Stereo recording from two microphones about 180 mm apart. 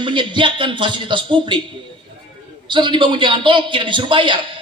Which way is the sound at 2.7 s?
25° right (ahead or behind).